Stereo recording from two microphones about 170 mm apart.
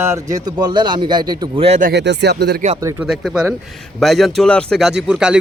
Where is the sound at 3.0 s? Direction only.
5° right (ahead or behind).